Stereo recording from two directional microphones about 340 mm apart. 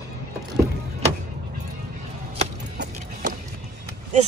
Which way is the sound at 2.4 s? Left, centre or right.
Right.